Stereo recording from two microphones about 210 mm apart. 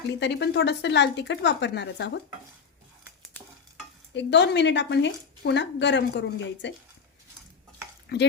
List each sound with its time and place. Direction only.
0.2 s a woman's voice: 55° left (ahead or behind)
4.1 s a woman's voice: 55° left (ahead or behind)
8.1 s speech: 50° left (ahead or behind)